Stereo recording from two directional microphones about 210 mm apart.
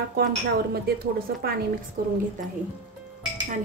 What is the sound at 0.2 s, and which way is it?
Speech, 50° right (ahead or behind).